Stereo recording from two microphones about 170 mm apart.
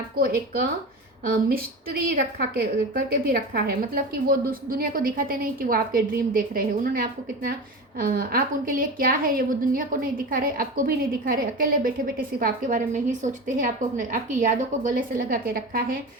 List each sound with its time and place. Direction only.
0.2 s a woman's voice: 60° right (ahead or behind)